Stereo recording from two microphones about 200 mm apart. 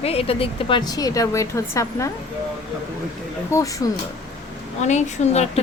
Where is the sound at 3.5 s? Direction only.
15° left (ahead or behind).